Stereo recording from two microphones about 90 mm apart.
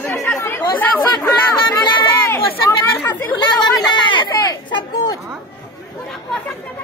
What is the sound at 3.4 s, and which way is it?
Speech, 55° left (ahead or behind).